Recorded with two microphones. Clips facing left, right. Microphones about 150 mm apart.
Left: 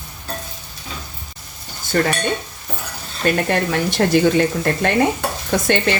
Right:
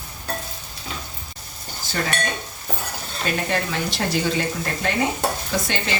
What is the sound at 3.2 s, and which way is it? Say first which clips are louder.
Speech: left 6 dB; 55° left (ahead or behind).